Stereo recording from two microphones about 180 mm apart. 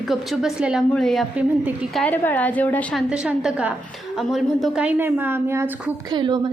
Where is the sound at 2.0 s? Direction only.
10° left (ahead or behind); by 5.7 s 10° right (ahead or behind).